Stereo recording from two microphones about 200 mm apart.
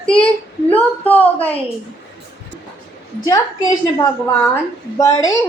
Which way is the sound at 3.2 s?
15° left (ahead or behind).